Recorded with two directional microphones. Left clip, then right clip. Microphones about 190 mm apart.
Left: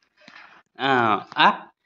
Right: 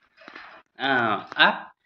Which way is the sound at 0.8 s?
55° left (ahead or behind).